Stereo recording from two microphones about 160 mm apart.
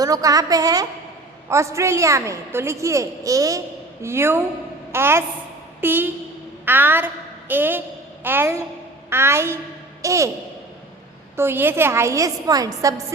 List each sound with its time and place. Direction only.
0.0 s a woman's voice: 20° right (ahead or behind)
11.3 s a woman's voice: 15° right (ahead or behind)